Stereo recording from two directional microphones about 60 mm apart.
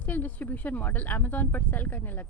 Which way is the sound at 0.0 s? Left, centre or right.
Left.